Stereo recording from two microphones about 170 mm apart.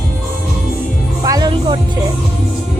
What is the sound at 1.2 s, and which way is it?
Music, 25° right (ahead or behind).